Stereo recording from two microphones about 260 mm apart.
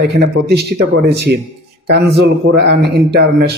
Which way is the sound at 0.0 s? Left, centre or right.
Right.